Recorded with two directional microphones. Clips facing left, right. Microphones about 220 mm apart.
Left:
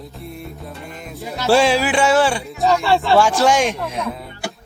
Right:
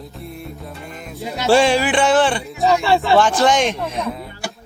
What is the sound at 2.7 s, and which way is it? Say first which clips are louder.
Speech: right 1 dB; 10° right (ahead or behind).